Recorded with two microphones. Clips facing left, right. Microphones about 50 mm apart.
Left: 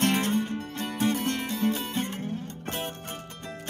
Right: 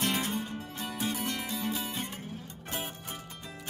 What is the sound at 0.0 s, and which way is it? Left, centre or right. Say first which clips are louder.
Music: left 6 dB; left.